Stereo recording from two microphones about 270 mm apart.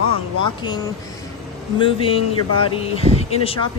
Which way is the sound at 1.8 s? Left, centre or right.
Centre.